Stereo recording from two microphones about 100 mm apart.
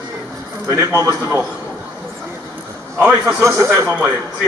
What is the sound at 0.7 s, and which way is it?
Speech, 30° right (ahead or behind).